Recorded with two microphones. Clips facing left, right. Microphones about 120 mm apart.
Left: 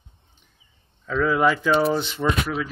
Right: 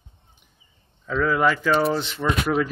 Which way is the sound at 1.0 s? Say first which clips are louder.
Left 1 dB; centre (ahead or behind).